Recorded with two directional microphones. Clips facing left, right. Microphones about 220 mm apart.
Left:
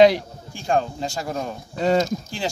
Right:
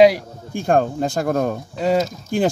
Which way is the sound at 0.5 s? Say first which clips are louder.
Right 5 dB; 55° right (ahead or behind).